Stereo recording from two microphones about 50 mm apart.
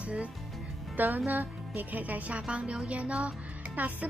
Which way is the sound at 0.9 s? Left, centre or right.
Right.